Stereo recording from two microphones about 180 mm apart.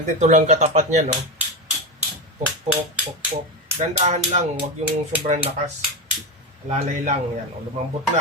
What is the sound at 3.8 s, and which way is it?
Speech, 40° right (ahead or behind).